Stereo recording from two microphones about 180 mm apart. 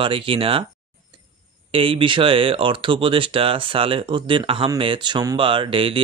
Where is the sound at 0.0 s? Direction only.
30° right (ahead or behind).